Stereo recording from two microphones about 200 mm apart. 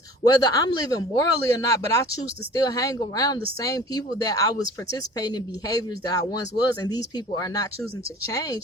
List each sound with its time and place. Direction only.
0.3 s speech: 20° left (ahead or behind)